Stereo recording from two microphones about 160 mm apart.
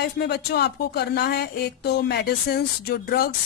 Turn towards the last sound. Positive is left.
turn(degrees=70)  # may be behind; listen again after turning